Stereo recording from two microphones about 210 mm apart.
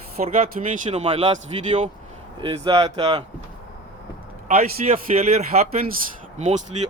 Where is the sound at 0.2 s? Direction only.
40° right (ahead or behind); by 3.2 s 20° right (ahead or behind).